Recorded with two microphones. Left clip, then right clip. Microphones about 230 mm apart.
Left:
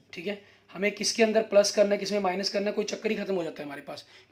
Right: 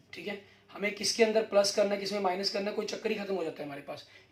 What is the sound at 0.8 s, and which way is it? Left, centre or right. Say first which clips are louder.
Speech: left 3 dB; left.